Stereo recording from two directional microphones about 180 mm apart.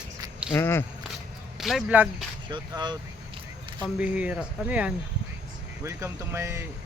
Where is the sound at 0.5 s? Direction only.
15° left (ahead or behind).